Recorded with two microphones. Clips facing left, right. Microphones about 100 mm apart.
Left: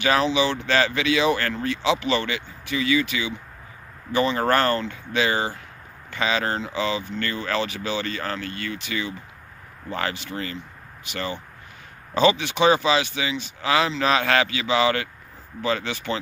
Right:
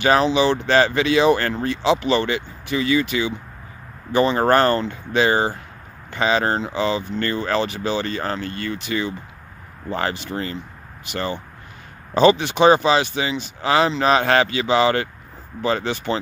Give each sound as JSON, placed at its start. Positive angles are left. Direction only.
{"t": 0.0, "sound": "speech", "side_deg": -35}
{"t": 12.1, "sound": "speech", "side_deg": -35}